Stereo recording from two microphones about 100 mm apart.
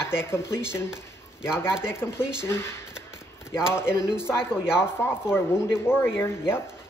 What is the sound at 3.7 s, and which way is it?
Speech, 25° left (ahead or behind).